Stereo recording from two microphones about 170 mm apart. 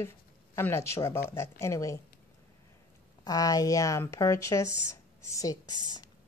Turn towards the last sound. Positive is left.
turn(degrees=20)  # may be behind; listen again after turning